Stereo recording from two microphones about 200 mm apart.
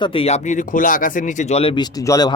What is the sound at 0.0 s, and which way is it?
Speech, 30° left (ahead or behind).